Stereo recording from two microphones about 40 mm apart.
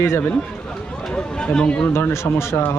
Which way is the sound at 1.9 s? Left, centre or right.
Left.